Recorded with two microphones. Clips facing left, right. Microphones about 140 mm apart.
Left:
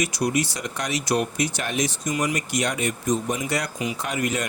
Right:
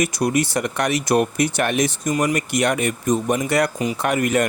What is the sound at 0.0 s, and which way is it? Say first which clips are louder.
Speech: right 4 dB; 50° right (ahead or behind).